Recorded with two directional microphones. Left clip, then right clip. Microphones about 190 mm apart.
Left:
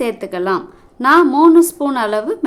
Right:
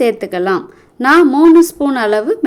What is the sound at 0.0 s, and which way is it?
A woman's voice, 15° right (ahead or behind).